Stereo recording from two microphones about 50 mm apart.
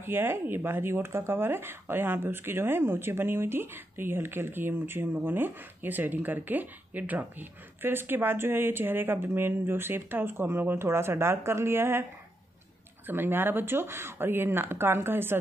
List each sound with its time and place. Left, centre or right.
0.0 s speech: right